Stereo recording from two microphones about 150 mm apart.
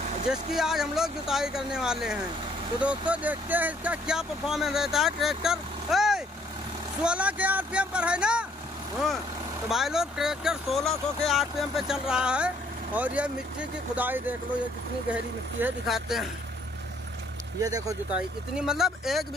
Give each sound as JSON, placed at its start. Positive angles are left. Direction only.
{"t": 0.3, "sound": "speech", "side_deg": -5}
{"t": 9.7, "sound": "speech", "side_deg": -5}
{"t": 17.6, "sound": "speech", "side_deg": -25}
{"t": 18.1, "sound": "speech", "side_deg": -5}